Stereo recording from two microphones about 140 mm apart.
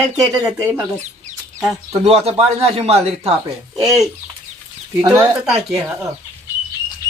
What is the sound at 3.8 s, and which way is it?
Speech, centre (ahead or behind).